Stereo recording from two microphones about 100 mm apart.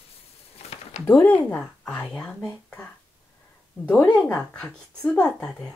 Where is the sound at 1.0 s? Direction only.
20° left (ahead or behind).